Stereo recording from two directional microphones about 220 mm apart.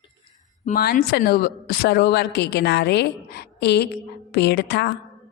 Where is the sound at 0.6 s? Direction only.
40° left (ahead or behind).